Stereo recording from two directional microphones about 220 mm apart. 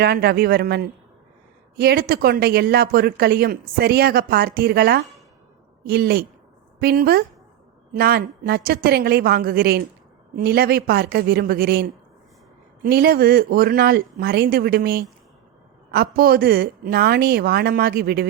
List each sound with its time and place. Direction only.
0.0 s speech: 45° right (ahead or behind)